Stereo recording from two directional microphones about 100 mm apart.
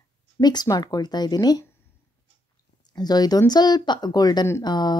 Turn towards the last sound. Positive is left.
turn(degrees=45)  # may be behind; listen again after turning